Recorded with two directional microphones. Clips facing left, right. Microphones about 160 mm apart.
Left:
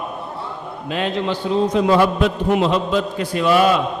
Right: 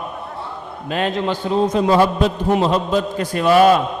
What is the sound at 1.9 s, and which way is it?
A man's voice, 35° right (ahead or behind).